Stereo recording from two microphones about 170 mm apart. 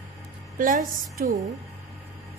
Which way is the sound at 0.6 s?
50° right (ahead or behind).